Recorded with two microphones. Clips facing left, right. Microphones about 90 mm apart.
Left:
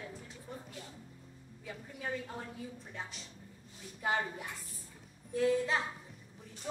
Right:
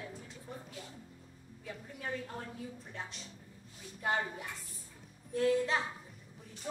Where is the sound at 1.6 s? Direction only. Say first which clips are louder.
Left 1 dB; centre (ahead or behind).